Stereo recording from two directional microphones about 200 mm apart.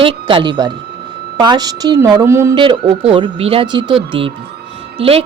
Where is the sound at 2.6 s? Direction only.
25° right (ahead or behind).